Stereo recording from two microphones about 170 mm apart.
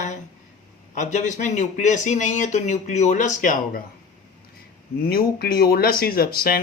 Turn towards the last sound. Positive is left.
turn(degrees=60)  # may be behind; listen again after turning